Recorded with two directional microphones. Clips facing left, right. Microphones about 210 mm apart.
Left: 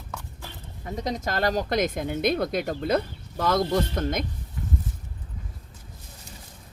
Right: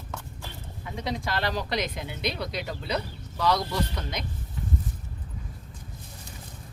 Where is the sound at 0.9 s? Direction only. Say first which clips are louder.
Left 3 dB; 40° left (ahead or behind).